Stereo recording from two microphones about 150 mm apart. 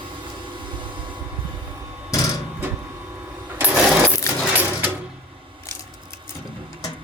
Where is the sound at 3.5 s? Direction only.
10° right (ahead or behind).